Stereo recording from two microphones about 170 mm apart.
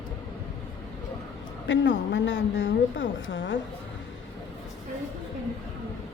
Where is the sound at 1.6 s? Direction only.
90° left.